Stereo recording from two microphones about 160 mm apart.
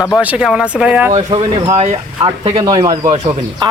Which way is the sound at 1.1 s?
30° right (ahead or behind).